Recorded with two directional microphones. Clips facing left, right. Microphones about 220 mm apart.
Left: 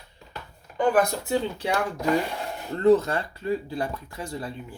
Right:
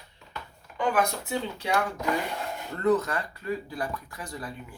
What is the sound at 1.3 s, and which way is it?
Speech, 30° left (ahead or behind).